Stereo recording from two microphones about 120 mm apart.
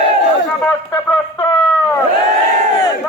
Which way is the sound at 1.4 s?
35° left (ahead or behind).